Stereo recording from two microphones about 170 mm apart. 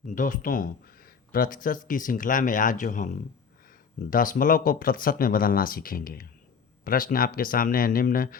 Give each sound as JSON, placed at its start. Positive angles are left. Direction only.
{"t": 0.0, "sound": "speech", "side_deg": 50}